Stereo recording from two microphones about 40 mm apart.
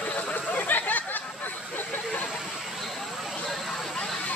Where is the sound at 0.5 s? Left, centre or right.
Left.